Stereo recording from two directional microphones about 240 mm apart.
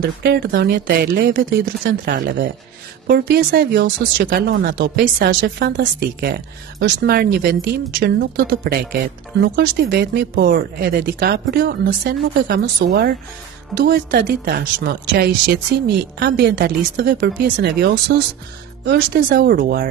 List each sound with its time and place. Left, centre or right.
0.2 s speech: right